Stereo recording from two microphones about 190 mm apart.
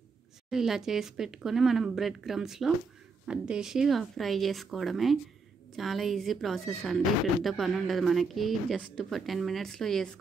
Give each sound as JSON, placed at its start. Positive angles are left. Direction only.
{"t": 0.5, "sound": "speech", "side_deg": 0}